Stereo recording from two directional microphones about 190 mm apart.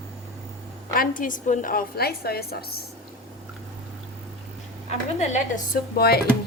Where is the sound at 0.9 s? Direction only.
45° left (ahead or behind).